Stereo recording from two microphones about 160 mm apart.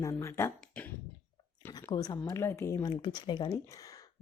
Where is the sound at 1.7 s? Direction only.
20° left (ahead or behind).